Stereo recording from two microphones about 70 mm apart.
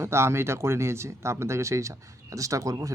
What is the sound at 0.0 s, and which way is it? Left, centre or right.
Speech, right.